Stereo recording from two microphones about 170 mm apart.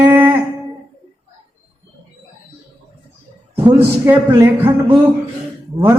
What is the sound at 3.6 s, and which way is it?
Speech, 15° right (ahead or behind).